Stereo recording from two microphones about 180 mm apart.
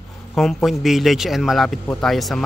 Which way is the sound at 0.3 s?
Centre (ahead or behind).